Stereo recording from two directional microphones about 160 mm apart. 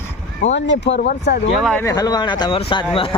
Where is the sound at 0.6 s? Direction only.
90° left.